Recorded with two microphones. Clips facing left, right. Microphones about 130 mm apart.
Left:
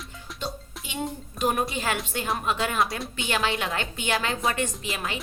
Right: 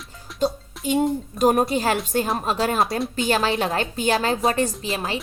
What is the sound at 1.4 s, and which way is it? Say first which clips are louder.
A woman's voice: right 7 dB; 45° right (ahead or behind).